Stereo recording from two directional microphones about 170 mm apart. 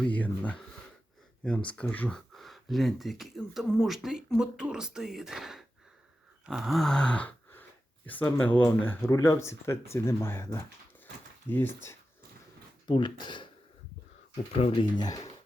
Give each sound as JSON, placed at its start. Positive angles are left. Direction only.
{"t": 0.0, "sound": "speech", "side_deg": 10}
{"t": 6.4, "sound": "a sound", "side_deg": 0}
{"t": 8.0, "sound": "speech", "side_deg": 10}
{"t": 12.9, "sound": "speech", "side_deg": 25}
{"t": 14.5, "sound": "speech", "side_deg": 35}